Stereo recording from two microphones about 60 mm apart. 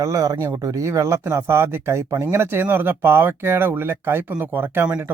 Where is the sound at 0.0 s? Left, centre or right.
Right.